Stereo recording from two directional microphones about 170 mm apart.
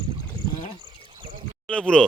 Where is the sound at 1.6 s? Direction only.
5° left (ahead or behind).